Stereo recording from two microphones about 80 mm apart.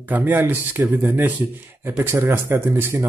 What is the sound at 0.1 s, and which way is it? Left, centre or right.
A man's voice, right.